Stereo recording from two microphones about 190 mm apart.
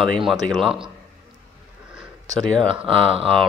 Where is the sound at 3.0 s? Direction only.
30° right (ahead or behind).